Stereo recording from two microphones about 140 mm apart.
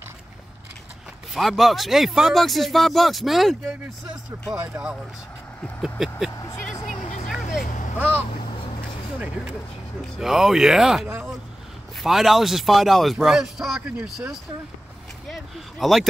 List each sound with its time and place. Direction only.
1.3 s speech: centre (ahead or behind)
5.8 s vehicle: 5° right (ahead or behind)
6.3 s vehicle: 25° left (ahead or behind)
7.6 s vehicle: 65° left (ahead or behind)
10.1 s speech: 5° right (ahead or behind)